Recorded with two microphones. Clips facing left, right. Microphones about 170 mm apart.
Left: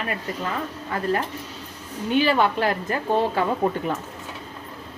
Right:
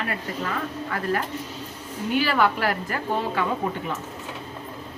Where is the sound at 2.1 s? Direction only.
20° left (ahead or behind).